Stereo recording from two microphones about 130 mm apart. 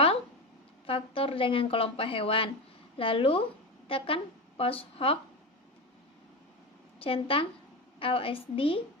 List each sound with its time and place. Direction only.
0.9 s a woman's voice: 45° left (ahead or behind)
7.0 s speech: 45° left (ahead or behind)